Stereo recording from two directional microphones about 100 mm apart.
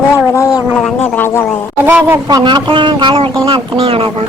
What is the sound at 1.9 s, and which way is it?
Speech, 15° right (ahead or behind).